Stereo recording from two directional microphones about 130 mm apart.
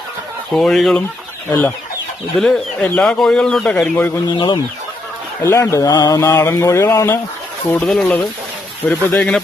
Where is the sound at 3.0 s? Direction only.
5° left (ahead or behind).